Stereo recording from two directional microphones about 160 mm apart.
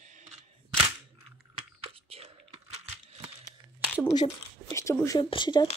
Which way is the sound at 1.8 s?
35° right (ahead or behind).